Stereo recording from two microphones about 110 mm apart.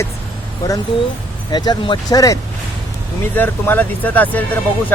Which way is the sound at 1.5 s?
40° left (ahead or behind).